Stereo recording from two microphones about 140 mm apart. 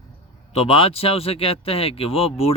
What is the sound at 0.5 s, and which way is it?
Speech, 45° left (ahead or behind).